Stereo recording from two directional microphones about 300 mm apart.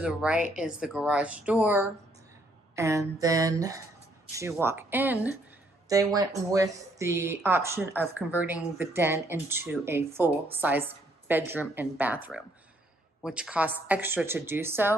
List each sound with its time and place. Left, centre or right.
0.0 s speech: centre